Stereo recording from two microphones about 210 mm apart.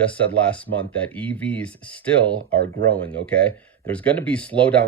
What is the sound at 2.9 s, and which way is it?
Speech, 5° left (ahead or behind).